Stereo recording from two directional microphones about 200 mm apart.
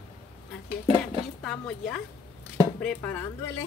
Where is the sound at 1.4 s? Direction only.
5° left (ahead or behind).